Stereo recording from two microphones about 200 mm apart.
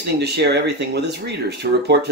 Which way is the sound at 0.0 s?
55° right (ahead or behind).